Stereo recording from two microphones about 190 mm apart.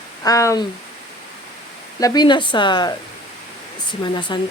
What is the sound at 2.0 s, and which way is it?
Speech, 20° left (ahead or behind).